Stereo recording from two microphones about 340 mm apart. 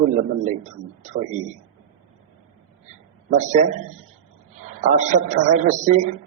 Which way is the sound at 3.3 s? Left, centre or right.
Right.